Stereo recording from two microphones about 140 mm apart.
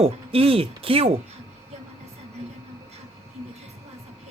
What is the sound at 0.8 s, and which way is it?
Speech, 40° right (ahead or behind).